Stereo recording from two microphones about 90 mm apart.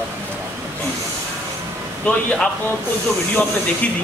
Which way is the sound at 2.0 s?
10° left (ahead or behind).